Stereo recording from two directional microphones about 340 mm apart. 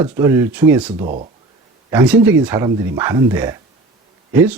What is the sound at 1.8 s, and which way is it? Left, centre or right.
Speech, centre.